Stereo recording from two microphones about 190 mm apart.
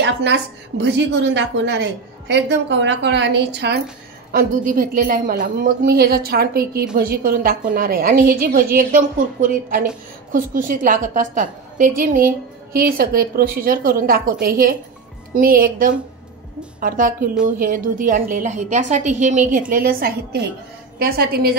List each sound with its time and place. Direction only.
0.0 s a woman's voice: 65° right (ahead or behind)
4.3 s a woman's voice: 50° right (ahead or behind)